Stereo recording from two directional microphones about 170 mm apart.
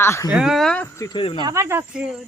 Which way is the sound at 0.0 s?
15° left (ahead or behind).